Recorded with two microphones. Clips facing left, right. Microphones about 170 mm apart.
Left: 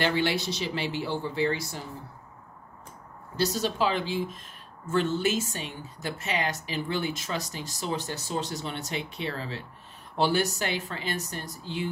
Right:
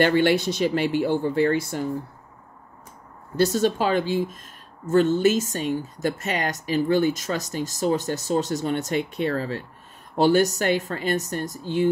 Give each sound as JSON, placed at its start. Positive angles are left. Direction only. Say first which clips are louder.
{"t": 0.0, "sound": "speech", "louder": "right 8 dB", "side_deg": -55}
{"t": 3.3, "sound": "speech", "louder": "right 6 dB", "side_deg": -50}